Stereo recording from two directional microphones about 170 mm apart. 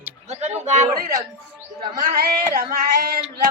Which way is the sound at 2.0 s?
60° right (ahead or behind).